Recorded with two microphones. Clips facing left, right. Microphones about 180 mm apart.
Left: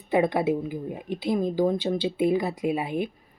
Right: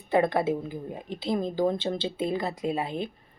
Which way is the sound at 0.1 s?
15° left (ahead or behind).